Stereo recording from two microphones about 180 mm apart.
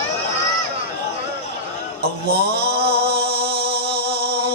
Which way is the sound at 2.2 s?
65° right (ahead or behind).